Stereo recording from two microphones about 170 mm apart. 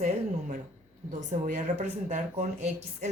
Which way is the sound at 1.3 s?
45° right (ahead or behind).